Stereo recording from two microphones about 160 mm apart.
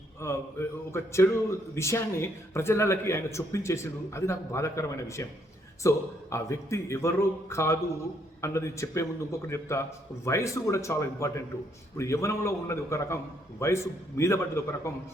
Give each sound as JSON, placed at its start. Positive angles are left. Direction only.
{"t": 0.2, "sound": "a man's voice", "side_deg": 15}